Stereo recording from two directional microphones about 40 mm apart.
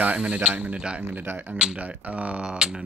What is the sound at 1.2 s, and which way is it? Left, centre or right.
Speech, right.